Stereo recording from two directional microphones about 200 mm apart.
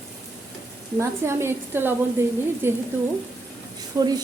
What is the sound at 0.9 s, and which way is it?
A woman's voice, 10° right (ahead or behind).